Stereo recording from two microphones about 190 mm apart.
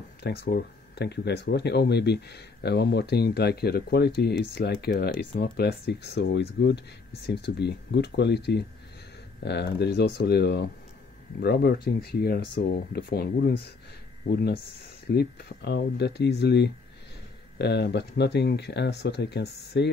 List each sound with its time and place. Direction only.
0.2 s speech: 60° left (ahead or behind)